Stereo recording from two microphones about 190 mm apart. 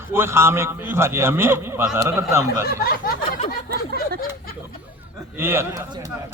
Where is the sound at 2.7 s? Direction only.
50° left (ahead or behind).